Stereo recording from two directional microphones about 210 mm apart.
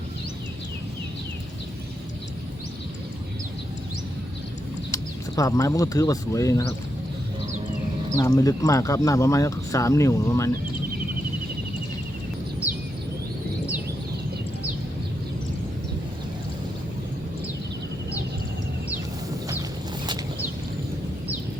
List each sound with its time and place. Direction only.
5.4 s speech: 15° left (ahead or behind)
8.1 s speech: 15° left (ahead or behind)